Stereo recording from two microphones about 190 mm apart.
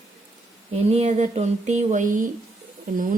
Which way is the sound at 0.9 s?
35° right (ahead or behind).